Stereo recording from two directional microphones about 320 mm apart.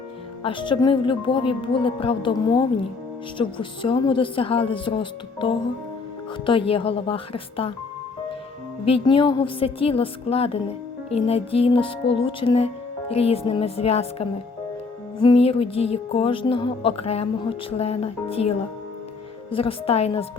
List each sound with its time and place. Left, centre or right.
0.4 s music: centre
8.8 s music: centre
17.7 s speech: centre
19.5 s music: centre